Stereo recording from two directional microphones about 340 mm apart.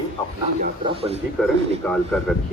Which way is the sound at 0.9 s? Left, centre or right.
Centre.